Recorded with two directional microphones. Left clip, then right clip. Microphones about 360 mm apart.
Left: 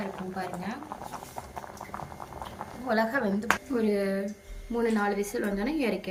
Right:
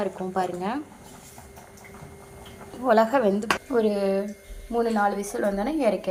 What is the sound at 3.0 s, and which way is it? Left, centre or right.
Speech, right.